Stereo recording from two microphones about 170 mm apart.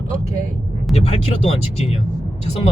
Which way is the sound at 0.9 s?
35° left (ahead or behind).